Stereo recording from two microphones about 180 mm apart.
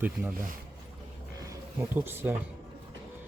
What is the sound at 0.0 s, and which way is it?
Speech, 10° right (ahead or behind).